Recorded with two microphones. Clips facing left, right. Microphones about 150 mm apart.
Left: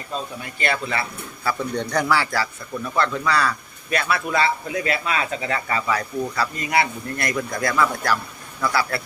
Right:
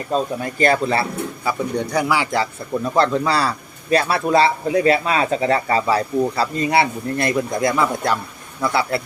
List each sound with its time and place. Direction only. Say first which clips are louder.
0.1 s a man's voice: right 9 dB; 40° right (ahead or behind)
1.5 s speech: right 2 dB; 10° right (ahead or behind)
2.7 s a man's voice: right 6 dB; 35° right (ahead or behind)